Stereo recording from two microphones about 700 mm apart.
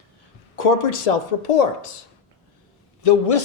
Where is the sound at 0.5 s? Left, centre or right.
Left.